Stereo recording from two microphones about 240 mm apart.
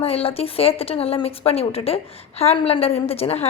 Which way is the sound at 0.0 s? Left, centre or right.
Left.